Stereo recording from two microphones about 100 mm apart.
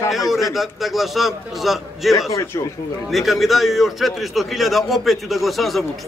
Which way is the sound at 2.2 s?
30° left (ahead or behind).